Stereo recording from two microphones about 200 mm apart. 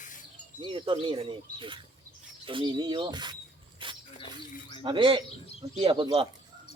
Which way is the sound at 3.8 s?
25° right (ahead or behind).